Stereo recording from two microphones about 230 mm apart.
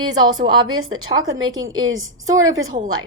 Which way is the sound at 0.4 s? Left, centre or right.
Centre.